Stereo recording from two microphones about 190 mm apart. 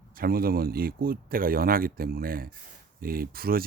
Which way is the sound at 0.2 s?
50° right (ahead or behind).